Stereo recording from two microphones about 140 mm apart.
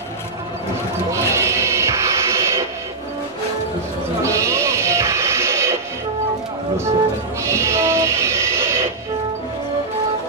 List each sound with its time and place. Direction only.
1.1 s music: 20° right (ahead or behind)
4.2 s music: 20° right (ahead or behind)
7.4 s music: 20° right (ahead or behind)